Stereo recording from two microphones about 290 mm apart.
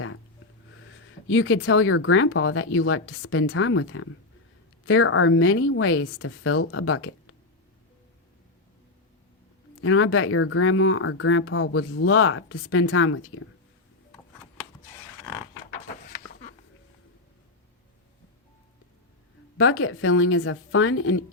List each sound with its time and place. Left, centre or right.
0.7 s speech: left
9.8 s speech: left
16.0 s a sound: left
19.5 s speech: left